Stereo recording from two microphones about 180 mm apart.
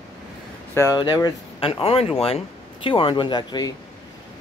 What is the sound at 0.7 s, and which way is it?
Speech, 20° left (ahead or behind).